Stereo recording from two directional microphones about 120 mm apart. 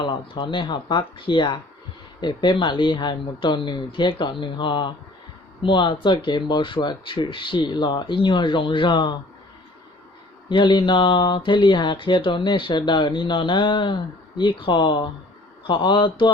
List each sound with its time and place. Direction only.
0.0 s speech: 45° left (ahead or behind)
10.5 s speech: 40° left (ahead or behind)